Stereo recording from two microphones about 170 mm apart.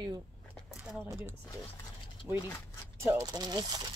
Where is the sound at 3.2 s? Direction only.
25° right (ahead or behind).